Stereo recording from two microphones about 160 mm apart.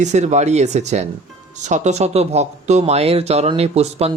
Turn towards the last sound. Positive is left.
turn(degrees=-40)  # may be behind; listen again after turning